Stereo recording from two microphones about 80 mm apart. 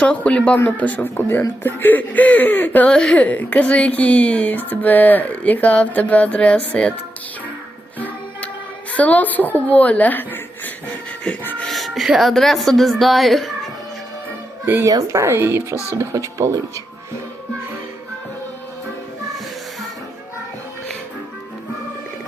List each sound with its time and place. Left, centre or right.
0.0 s speech: centre
2.9 s speech: centre
3.2 s speech: centre
7.9 s music: left
8.9 s speech: centre
11.2 s music: centre
11.7 s speech: centre
14.6 s speech: right
14.8 s speech: right